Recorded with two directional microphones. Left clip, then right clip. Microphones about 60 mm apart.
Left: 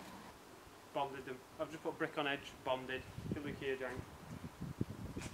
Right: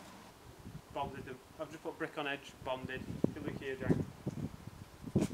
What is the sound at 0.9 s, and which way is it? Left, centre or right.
Speech, centre.